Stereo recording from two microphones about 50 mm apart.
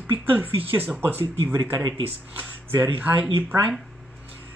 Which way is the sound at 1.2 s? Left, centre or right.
Right.